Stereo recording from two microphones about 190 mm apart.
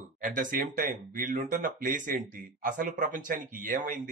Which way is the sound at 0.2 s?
45° right (ahead or behind).